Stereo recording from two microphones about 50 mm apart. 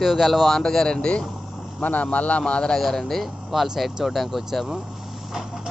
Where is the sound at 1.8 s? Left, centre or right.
Left.